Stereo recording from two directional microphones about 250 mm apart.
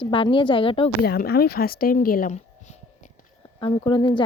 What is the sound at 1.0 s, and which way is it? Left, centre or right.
Speech, left.